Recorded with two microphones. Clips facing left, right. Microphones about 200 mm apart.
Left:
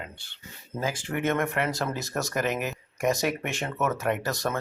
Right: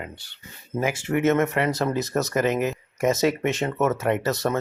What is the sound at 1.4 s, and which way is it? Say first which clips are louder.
Speech: right 5 dB; 20° right (ahead or behind).